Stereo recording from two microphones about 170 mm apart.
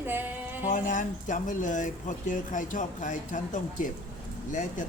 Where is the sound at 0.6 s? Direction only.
50° left (ahead or behind).